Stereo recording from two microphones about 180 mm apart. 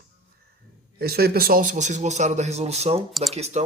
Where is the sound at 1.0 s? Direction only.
60° right (ahead or behind).